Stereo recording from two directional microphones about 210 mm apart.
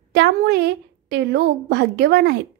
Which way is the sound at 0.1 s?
50° right (ahead or behind).